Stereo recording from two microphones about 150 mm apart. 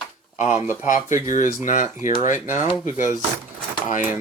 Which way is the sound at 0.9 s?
60° left (ahead or behind).